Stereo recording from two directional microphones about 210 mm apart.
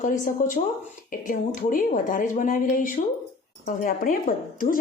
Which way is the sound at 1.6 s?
40° left (ahead or behind).